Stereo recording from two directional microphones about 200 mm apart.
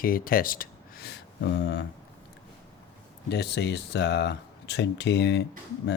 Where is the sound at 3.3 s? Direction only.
55° left (ahead or behind).